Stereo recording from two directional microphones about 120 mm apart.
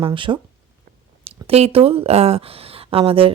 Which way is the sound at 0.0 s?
45° right (ahead or behind).